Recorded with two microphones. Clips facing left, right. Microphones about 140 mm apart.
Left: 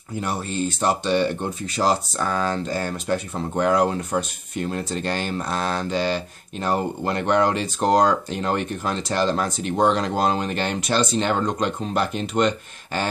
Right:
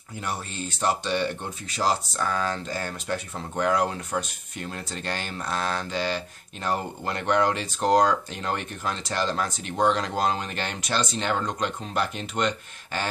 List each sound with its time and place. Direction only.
0.2 s speech: 35° left (ahead or behind)